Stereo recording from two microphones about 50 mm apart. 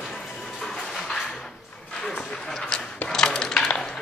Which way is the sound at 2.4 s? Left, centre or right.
Centre.